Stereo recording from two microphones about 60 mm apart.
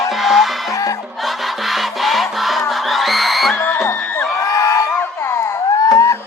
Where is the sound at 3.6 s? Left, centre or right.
Left.